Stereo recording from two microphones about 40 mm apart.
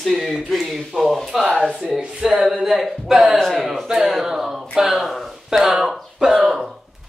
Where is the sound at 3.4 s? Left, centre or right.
Centre.